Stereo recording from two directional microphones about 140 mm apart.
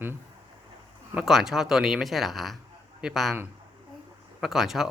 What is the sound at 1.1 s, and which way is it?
Speech, centre (ahead or behind).